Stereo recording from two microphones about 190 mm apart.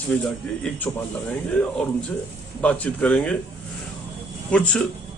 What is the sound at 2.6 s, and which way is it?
Speech, 5° left (ahead or behind).